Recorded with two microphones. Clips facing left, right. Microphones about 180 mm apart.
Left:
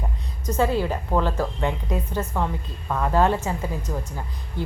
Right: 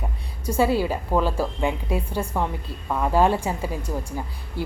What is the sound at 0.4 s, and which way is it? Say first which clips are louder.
Speech: right 1 dB; 10° right (ahead or behind).